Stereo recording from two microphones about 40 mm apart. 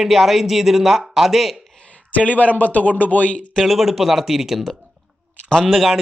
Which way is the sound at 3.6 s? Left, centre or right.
Centre.